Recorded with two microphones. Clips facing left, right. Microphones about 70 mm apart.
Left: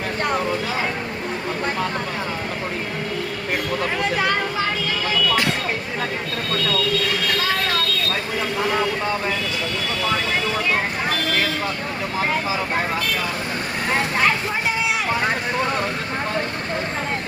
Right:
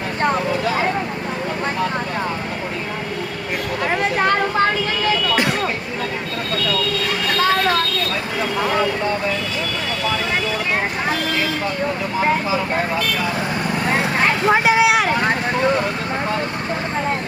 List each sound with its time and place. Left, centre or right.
14.4 s vehicle: right